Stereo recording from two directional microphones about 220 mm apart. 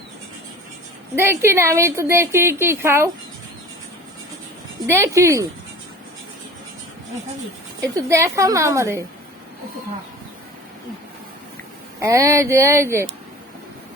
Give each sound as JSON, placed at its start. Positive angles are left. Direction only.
{"t": 1.1, "sound": "a woman's voice", "side_deg": -10}
{"t": 4.9, "sound": "a woman's voice", "side_deg": -15}
{"t": 7.8, "sound": "a woman's voice", "side_deg": -15}
{"t": 11.9, "sound": "a woman's voice", "side_deg": -15}